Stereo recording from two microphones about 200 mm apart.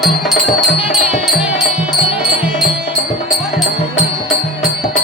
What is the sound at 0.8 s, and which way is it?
Music, 5° right (ahead or behind).